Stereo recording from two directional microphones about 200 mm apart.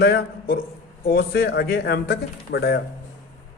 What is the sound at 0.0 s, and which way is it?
A man's voice, 50° left (ahead or behind).